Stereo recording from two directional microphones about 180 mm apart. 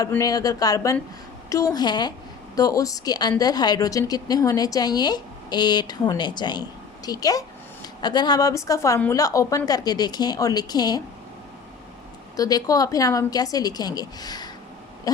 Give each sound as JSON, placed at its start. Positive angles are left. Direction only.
{"t": 0.0, "sound": "a woman's voice", "side_deg": 20}
{"t": 12.4, "sound": "a woman's voice", "side_deg": 20}
{"t": 15.1, "sound": "owl", "side_deg": 20}